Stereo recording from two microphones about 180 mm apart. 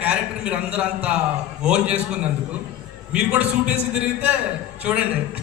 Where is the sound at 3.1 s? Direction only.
5° right (ahead or behind).